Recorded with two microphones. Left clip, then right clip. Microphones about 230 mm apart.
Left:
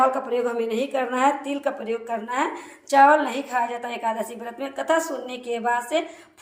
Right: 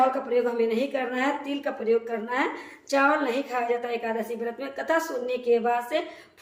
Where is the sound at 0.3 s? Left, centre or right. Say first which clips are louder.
Even; centre.